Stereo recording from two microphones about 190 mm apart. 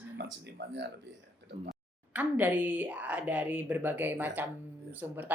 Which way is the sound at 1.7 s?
10° right (ahead or behind).